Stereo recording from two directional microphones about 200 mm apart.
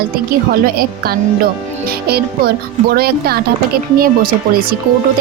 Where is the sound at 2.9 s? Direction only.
50° right (ahead or behind).